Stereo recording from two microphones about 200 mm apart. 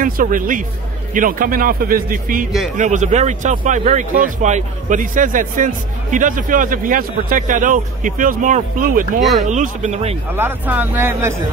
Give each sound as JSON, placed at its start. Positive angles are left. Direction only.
{"t": 0.0, "sound": "speech", "side_deg": -40}
{"t": 10.3, "sound": "a man's voice", "side_deg": -10}